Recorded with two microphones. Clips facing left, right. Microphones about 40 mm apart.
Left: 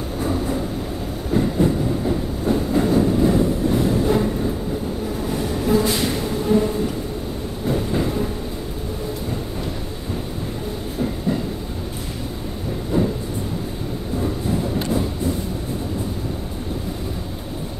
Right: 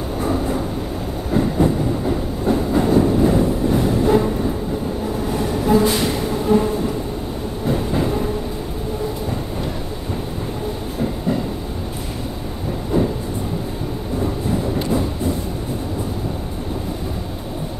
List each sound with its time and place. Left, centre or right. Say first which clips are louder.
0.2 s vehicle: right 2 dB; centre
1.3 s train: right 1 dB; centre
5.3 s a sound: right 3 dB; centre
7.6 s train: right 1 dB; centre
12.9 s train: right 2 dB; centre